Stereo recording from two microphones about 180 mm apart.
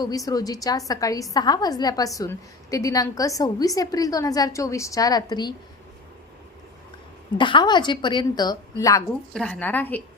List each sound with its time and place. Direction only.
0.0 s a woman's voice: 20° left (ahead or behind)
7.3 s a woman's voice: 25° left (ahead or behind)
9.3 s a woman's voice: 5° left (ahead or behind)